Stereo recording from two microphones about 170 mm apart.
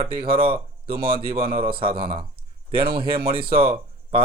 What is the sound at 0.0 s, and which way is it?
Speech, 35° right (ahead or behind).